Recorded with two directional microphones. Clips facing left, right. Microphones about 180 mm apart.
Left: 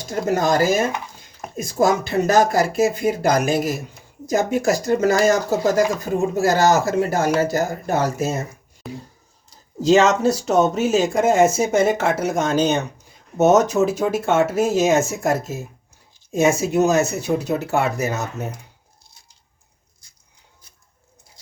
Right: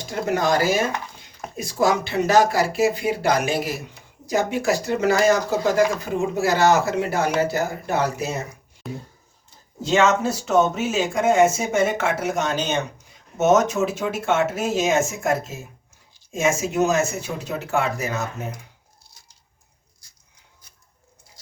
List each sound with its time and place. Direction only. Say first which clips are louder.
0.0 s speech: left 2 dB; 45° left (ahead or behind)
8.8 s speech: even; centre (ahead or behind)
9.8 s speech: left 4 dB; 40° left (ahead or behind)